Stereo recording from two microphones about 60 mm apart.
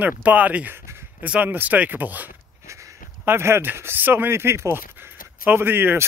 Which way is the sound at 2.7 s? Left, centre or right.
Right.